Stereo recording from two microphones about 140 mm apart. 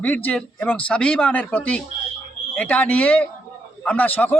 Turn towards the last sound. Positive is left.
turn(degrees=10)  # may be behind; listen again after turning